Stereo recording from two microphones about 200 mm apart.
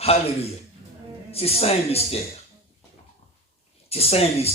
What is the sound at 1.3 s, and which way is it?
Speech, 30° left (ahead or behind).